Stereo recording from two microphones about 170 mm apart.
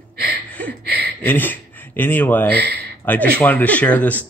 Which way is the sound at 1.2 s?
10° left (ahead or behind).